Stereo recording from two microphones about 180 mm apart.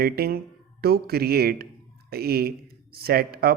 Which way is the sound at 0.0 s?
60° right (ahead or behind).